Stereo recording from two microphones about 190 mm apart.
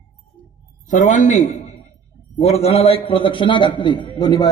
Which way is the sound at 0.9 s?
40° left (ahead or behind).